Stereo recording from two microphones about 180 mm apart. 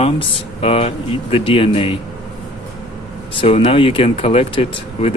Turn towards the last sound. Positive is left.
turn(degrees=30)  # may be behind; listen again after turning